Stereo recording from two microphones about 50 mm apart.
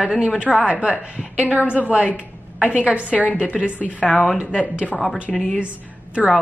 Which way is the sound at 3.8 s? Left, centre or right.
Left.